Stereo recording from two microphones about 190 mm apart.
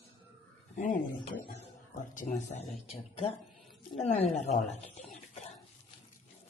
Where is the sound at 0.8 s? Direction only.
40° left (ahead or behind).